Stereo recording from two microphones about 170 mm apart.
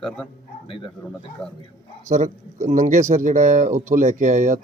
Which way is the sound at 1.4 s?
5° left (ahead or behind).